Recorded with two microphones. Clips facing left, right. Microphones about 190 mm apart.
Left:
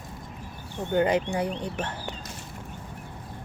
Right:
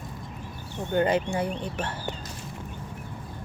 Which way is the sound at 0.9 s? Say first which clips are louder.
Even; 15° left (ahead or behind).